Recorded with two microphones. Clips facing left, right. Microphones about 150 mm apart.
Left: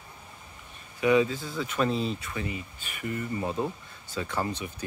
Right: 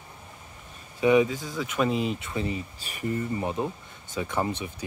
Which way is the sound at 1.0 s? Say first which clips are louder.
Right 2 dB; 15° right (ahead or behind).